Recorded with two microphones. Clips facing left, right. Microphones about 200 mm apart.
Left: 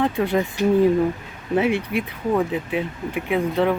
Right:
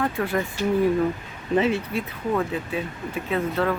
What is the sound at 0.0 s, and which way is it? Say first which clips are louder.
Speech: left 4 dB; 20° left (ahead or behind).